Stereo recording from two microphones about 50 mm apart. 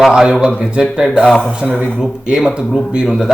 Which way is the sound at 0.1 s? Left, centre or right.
Centre.